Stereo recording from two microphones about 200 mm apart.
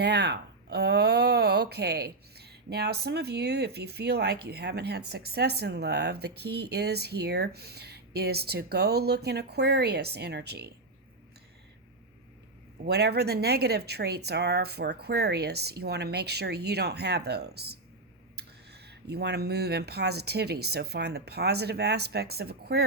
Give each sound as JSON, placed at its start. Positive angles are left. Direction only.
{"t": 0.0, "sound": "speech", "side_deg": -55}
{"t": 12.8, "sound": "speech", "side_deg": -55}